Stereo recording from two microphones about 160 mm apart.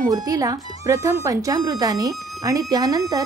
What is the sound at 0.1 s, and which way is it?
Speech, 25° right (ahead or behind).